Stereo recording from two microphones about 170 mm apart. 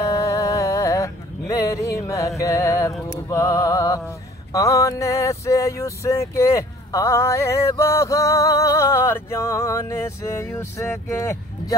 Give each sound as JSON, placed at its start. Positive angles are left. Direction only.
{"t": 0.0, "sound": "music", "side_deg": 20}
{"t": 3.3, "sound": "mantra", "side_deg": 20}